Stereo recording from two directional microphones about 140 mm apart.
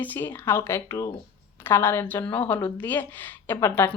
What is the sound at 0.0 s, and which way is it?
Speech, 15° left (ahead or behind).